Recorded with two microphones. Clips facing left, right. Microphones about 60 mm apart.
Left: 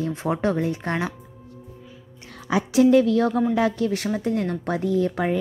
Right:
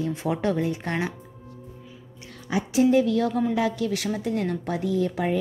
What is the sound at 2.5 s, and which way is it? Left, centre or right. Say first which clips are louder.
A woman's voice: left 4 dB; left.